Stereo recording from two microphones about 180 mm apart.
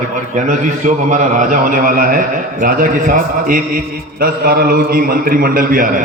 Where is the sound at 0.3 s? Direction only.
45° right (ahead or behind).